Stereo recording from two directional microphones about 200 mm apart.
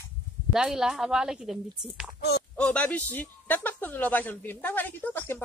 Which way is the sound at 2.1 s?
55° left (ahead or behind).